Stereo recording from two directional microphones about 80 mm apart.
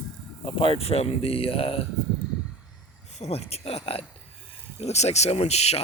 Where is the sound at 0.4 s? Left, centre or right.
Left.